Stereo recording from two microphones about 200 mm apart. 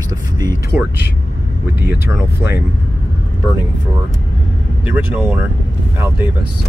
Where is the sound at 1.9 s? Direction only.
10° right (ahead or behind).